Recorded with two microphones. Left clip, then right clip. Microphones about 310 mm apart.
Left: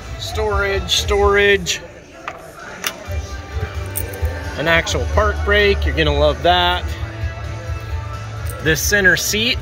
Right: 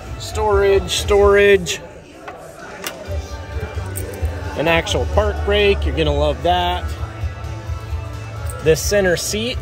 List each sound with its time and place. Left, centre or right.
0.3 s speech: centre
4.6 s speech: centre
8.6 s speech: centre